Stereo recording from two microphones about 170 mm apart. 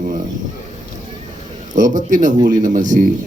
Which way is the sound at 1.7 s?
50° right (ahead or behind).